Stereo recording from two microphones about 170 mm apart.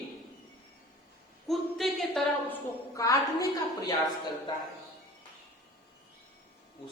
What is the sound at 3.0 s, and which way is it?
Speech, 20° left (ahead or behind).